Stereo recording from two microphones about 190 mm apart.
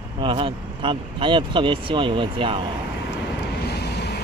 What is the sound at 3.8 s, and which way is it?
Vehicle, 60° left (ahead or behind).